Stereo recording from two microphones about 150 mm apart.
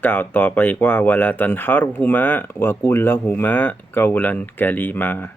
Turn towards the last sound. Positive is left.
turn(degrees=10)  # may be behind; listen again after turning